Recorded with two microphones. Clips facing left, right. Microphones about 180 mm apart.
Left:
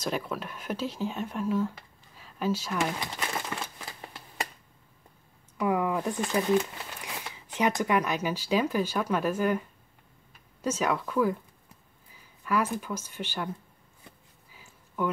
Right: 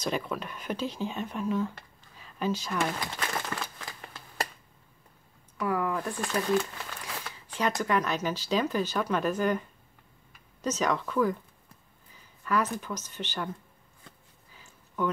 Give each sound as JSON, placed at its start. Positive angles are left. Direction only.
{"t": 0.0, "sound": "speech", "side_deg": 5}
{"t": 3.2, "sound": "crumpling", "side_deg": 20}
{"t": 5.6, "sound": "speech", "side_deg": 20}
{"t": 12.4, "sound": "speech", "side_deg": 10}
{"t": 14.0, "sound": "a sound", "side_deg": 5}